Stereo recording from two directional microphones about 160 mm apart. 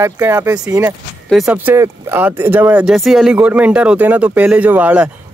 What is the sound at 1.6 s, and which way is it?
Speech, 15° right (ahead or behind).